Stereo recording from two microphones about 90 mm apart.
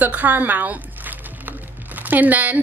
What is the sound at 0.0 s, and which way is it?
A woman's voice, 20° right (ahead or behind).